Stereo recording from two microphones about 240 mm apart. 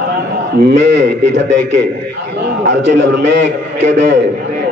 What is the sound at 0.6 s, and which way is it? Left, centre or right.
A man's voice, right.